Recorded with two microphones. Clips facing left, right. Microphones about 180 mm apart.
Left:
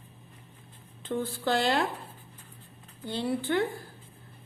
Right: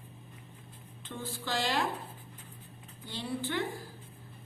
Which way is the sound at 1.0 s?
55° left (ahead or behind).